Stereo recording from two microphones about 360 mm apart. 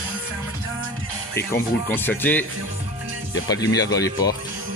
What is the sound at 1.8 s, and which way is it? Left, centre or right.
Speech, centre.